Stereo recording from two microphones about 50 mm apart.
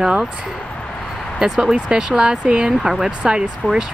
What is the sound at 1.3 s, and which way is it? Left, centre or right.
Speech, centre.